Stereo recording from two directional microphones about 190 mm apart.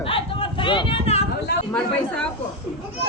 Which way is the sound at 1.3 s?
55° left (ahead or behind).